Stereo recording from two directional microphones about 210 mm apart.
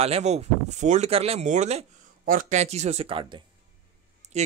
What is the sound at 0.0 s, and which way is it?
Speech, 30° right (ahead or behind).